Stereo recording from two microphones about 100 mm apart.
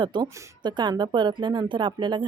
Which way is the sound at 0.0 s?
50° right (ahead or behind).